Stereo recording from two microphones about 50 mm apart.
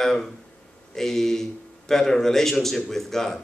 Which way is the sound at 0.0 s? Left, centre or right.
Centre.